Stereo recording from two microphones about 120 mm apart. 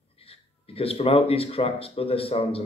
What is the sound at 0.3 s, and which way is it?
Speech, 50° left (ahead or behind).